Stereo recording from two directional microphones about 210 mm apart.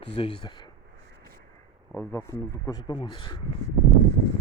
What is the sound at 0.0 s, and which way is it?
Speech, 25° left (ahead or behind).